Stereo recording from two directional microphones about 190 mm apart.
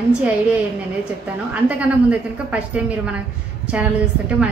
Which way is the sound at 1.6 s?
5° right (ahead or behind).